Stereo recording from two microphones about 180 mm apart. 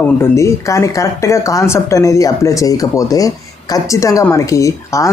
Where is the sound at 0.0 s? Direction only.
15° left (ahead or behind).